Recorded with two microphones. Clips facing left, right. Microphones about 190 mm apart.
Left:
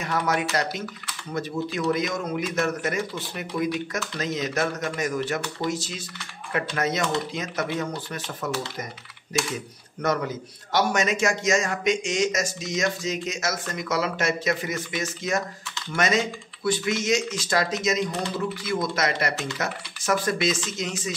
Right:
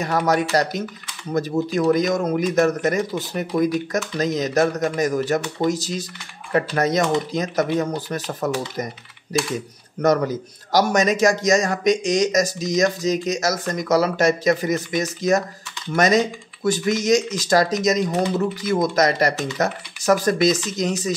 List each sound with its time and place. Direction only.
0.0 s a man's voice: 40° right (ahead or behind)